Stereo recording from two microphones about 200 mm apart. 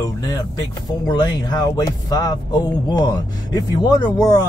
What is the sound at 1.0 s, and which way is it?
Speech, 20° left (ahead or behind).